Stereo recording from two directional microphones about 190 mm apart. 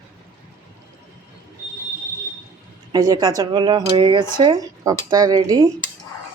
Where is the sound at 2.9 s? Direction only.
20° right (ahead or behind).